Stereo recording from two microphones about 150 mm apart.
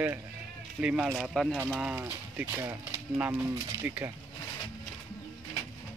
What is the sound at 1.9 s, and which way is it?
Speech, 15° right (ahead or behind).